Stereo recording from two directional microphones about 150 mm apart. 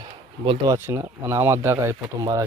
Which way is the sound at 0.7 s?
15° right (ahead or behind).